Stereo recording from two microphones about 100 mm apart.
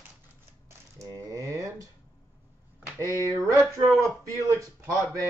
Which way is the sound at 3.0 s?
30° left (ahead or behind).